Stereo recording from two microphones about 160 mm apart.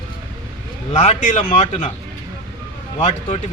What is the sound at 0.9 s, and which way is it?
Speech, 50° left (ahead or behind).